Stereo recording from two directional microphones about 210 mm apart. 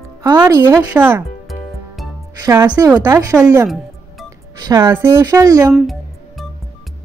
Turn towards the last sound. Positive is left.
turn(degrees=0)  # may be behind; listen again after turning